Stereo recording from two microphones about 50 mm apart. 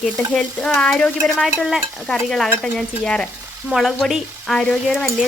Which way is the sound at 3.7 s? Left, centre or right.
Centre.